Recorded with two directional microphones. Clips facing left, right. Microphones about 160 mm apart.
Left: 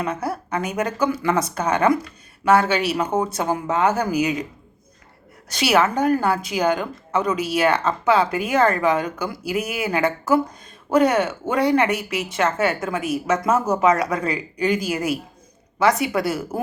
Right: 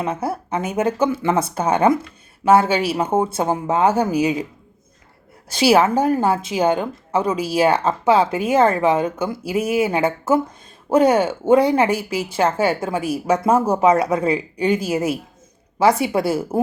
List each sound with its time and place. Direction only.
0.0 s a woman's voice: 25° right (ahead or behind)
5.5 s a woman's voice: 30° right (ahead or behind)